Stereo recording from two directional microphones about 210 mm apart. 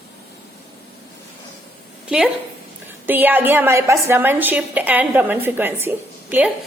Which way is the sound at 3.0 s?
10° right (ahead or behind).